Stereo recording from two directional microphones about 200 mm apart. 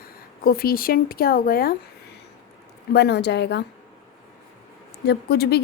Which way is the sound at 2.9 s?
55° left (ahead or behind).